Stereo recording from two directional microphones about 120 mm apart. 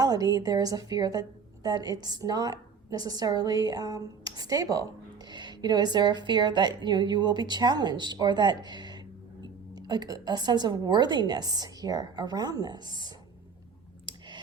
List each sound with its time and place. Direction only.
0.0 s a woman's voice: 30° right (ahead or behind)